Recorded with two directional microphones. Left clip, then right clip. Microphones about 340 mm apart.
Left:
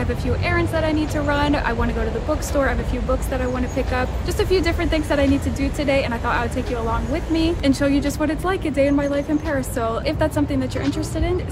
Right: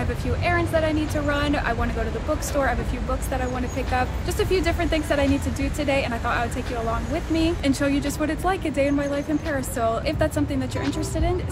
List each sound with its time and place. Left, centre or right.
0.5 s a woman's voice: centre
3.7 s a woman's voice: centre